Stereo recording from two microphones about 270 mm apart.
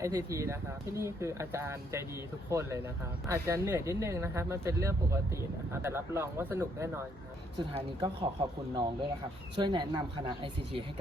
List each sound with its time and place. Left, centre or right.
0.0 s speech: centre